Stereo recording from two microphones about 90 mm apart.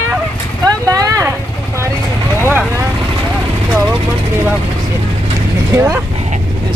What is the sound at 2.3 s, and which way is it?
Vehicle, 25° right (ahead or behind).